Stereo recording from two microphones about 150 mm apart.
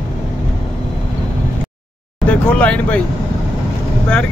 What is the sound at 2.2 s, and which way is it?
Speech, 10° left (ahead or behind).